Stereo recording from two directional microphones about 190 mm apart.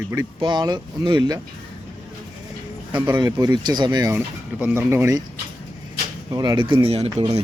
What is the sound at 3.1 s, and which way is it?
Speech, 20° right (ahead or behind).